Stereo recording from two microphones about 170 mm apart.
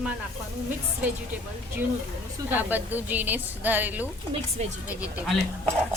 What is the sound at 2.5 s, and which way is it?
A woman's voice, 10° right (ahead or behind).